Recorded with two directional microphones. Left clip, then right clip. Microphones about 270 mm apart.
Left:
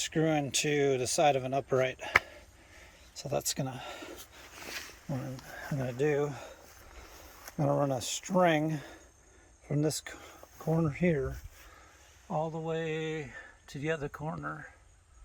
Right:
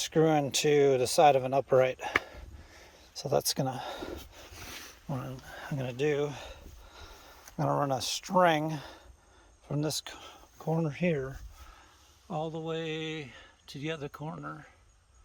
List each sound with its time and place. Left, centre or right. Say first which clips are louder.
0.0 s speech: right 4 dB; centre
7.6 s speech: right 1 dB; centre
12.3 s speech: left 1 dB; centre